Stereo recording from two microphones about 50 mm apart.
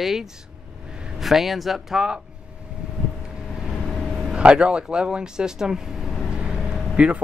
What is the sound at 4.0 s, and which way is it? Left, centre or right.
Vehicle, centre.